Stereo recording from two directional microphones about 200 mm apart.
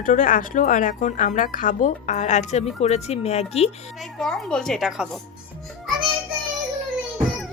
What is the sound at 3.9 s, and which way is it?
A woman's voice, centre (ahead or behind).